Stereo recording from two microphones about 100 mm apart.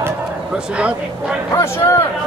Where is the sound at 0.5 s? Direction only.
10° right (ahead or behind).